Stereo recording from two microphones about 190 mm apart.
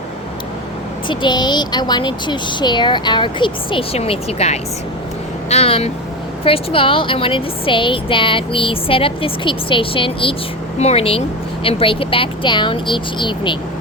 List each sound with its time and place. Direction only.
1.0 s a woman's voice: 25° left (ahead or behind)